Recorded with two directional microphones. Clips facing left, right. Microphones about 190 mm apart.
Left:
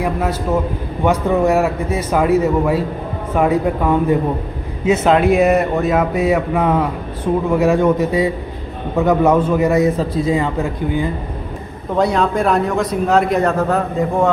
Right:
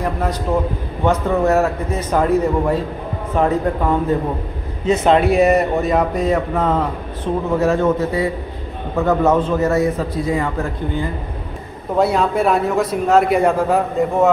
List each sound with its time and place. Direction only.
0.0 s a man's voice: 5° left (ahead or behind)
11.9 s a man's voice: 5° right (ahead or behind)